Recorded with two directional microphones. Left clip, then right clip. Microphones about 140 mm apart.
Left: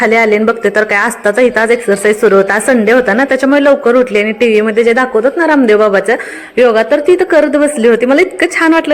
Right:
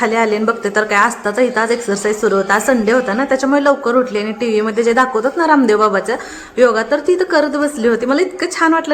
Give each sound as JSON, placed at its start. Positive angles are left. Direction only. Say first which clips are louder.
{"t": 0.0, "sound": "a woman's voice", "louder": "left 6 dB", "side_deg": 30}
{"t": 2.2, "sound": "a woman's voice", "louder": "left 4 dB", "side_deg": 35}